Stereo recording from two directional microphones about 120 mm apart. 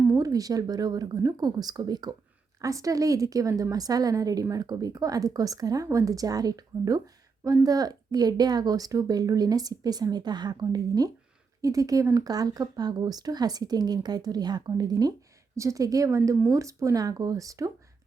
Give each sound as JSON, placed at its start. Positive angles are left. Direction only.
{"t": 0.1, "sound": "a woman's voice", "side_deg": -30}